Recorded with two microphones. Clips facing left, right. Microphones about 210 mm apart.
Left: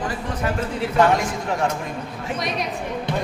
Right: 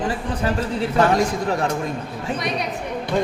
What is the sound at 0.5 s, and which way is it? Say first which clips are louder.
Speech: left 1 dB; 35° right (ahead or behind).